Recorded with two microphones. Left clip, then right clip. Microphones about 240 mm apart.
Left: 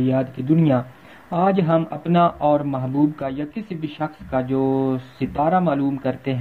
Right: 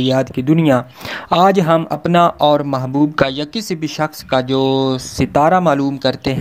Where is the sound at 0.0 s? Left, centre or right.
Right.